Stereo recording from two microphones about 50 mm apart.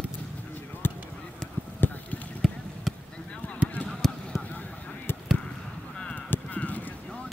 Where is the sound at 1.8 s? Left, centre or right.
Left.